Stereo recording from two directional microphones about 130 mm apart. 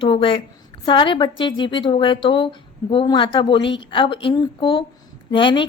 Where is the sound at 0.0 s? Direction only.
40° left (ahead or behind).